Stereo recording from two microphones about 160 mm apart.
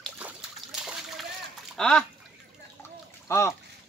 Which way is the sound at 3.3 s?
15° left (ahead or behind).